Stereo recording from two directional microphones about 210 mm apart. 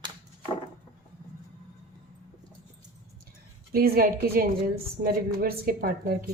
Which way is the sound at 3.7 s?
45° right (ahead or behind).